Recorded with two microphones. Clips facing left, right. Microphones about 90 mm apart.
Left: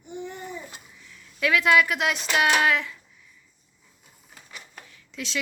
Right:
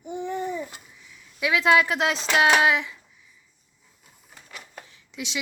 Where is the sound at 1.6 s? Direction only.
30° right (ahead or behind).